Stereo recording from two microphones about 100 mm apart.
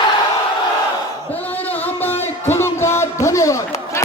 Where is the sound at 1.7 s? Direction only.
20° left (ahead or behind).